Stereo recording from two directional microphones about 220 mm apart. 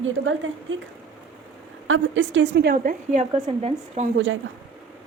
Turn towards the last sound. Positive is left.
turn(degrees=-55)  # may be behind; listen again after turning